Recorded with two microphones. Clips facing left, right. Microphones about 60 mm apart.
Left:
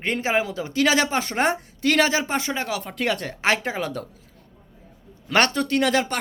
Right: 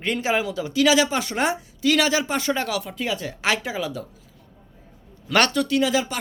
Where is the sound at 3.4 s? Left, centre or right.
Left.